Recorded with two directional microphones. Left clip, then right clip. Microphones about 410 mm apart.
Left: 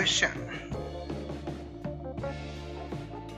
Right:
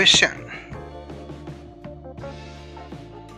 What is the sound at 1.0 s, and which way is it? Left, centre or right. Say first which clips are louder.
Music: even; centre.